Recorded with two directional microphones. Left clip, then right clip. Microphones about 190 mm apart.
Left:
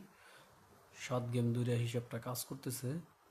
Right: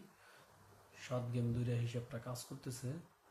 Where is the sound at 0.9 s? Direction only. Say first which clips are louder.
Left 4 dB; 35° left (ahead or behind).